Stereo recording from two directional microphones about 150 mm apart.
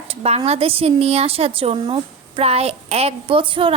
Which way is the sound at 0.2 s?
45° right (ahead or behind).